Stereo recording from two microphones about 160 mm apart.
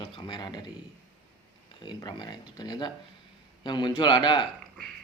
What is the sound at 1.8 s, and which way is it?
Speech, 25° left (ahead or behind).